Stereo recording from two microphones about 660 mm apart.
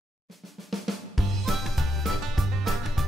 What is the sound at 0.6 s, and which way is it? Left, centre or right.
Drum, centre.